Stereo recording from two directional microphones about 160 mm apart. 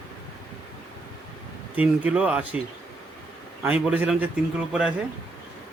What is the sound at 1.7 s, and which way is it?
Speech, 10° right (ahead or behind).